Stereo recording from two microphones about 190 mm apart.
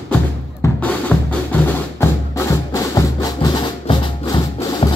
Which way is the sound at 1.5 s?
15° left (ahead or behind).